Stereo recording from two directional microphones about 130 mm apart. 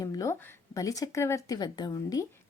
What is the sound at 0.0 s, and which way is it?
Speech, 25° left (ahead or behind).